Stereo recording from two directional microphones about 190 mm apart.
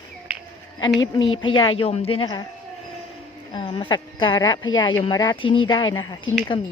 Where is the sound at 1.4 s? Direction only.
25° left (ahead or behind).